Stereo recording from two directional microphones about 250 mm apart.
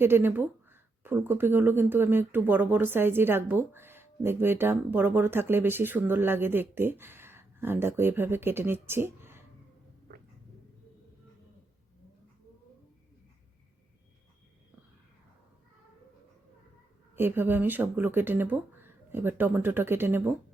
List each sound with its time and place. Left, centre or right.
0.0 s speech: centre
10.1 s cat: right
17.2 s speech: centre